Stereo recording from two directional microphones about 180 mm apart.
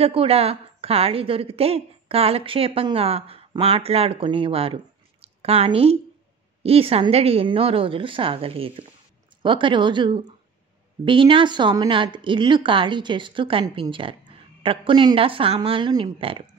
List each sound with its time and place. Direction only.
0.0 s a woman's voice: 30° right (ahead or behind)
4.7 s a sound: 35° right (ahead or behind)
6.6 s a woman's voice: 35° right (ahead or behind)